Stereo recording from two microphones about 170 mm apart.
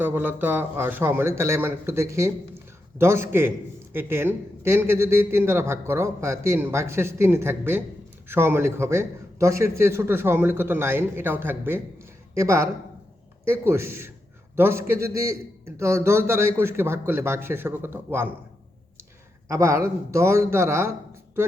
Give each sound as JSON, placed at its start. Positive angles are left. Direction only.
{"t": 0.0, "sound": "a man's voice", "side_deg": -10}
{"t": 19.5, "sound": "a man's voice", "side_deg": -15}